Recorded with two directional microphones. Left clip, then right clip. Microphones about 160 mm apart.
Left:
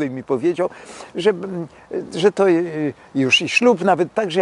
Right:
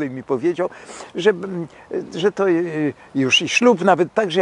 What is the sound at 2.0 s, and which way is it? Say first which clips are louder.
Speech: left 3 dB; 5° left (ahead or behind).